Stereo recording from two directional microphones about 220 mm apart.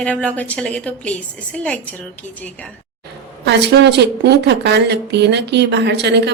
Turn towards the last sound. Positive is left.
turn(degrees=-50)  # may be behind; listen again after turning